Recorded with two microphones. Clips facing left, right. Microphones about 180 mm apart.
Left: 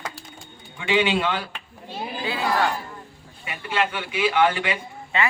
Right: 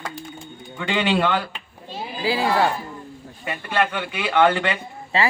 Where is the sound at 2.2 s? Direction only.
30° right (ahead or behind).